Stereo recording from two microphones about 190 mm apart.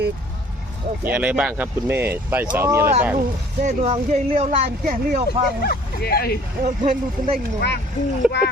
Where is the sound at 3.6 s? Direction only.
35° right (ahead or behind).